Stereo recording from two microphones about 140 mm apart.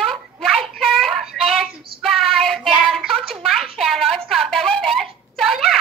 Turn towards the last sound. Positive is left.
turn(degrees=0)  # may be behind; listen again after turning